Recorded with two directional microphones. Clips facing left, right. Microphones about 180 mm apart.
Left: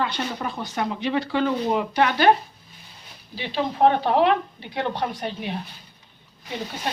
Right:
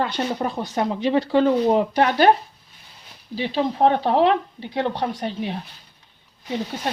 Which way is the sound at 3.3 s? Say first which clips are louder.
Right 3 dB; 35° right (ahead or behind).